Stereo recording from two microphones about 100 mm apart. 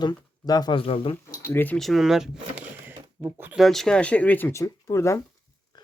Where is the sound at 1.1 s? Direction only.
20° left (ahead or behind).